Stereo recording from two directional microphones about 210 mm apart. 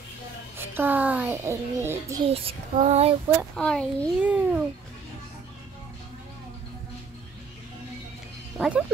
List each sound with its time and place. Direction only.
0.6 s a child's voice: 10° right (ahead or behind)
2.2 s child singing: 25° right (ahead or behind)
3.5 s a child's voice: 5° left (ahead or behind)
4.2 s a child's voice: 5° right (ahead or behind)
8.5 s speech: 5° right (ahead or behind)